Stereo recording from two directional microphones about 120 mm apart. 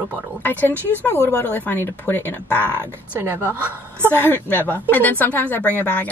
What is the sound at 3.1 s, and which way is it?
A woman's voice, 15° right (ahead or behind).